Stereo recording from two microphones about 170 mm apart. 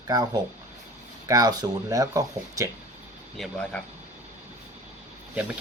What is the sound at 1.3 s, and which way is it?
Speech, 20° right (ahead or behind).